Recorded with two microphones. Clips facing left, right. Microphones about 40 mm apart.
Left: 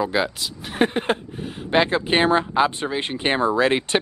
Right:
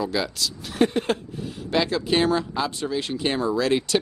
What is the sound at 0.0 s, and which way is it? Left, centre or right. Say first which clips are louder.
Speech: left 3 dB; left.